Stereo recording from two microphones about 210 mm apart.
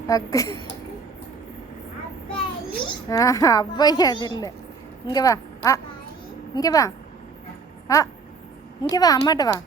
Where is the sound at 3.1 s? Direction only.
15° left (ahead or behind).